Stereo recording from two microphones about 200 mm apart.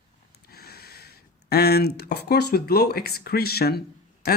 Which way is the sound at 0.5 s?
50° left (ahead or behind).